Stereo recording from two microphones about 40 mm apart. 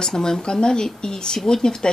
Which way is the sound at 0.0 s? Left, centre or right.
Centre.